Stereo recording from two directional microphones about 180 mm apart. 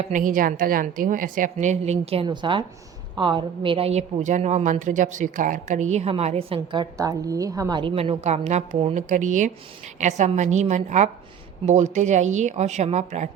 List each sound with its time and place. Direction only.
0.0 s a woman's voice: 45° right (ahead or behind)
1.5 s a woman's voice: 40° right (ahead or behind)